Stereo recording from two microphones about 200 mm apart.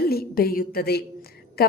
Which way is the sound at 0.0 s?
50° left (ahead or behind).